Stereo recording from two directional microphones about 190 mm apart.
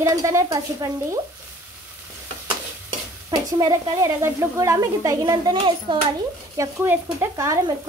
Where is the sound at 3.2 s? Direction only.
20° right (ahead or behind).